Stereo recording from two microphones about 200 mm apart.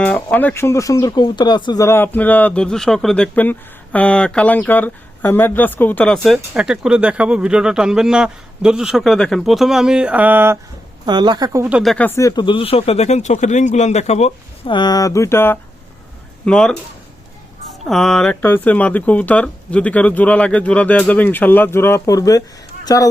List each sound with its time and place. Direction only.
0.0 s speech: 5° left (ahead or behind); by 10.6 s 10° right (ahead or behind)
11.0 s speech: 20° right (ahead or behind)
11.8 s speech: 5° left (ahead or behind)
17.8 s speech: centre (ahead or behind); by 23.0 s 20° left (ahead or behind)